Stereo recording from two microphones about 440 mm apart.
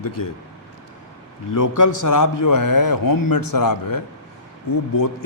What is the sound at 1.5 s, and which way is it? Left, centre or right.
A man's voice, left.